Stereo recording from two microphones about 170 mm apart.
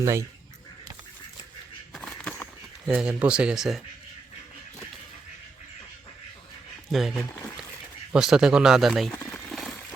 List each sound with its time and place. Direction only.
0.0 s speech: 15° right (ahead or behind)
1.9 s a sound: 5° left (ahead or behind)
2.9 s speech: 5° right (ahead or behind)
6.9 s speech: centre (ahead or behind)
9.1 s boiling: centre (ahead or behind)